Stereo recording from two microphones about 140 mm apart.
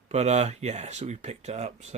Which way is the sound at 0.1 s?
50° right (ahead or behind).